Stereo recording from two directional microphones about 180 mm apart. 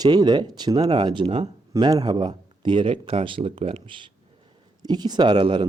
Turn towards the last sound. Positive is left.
turn(degrees=-25)  # may be behind; listen again after turning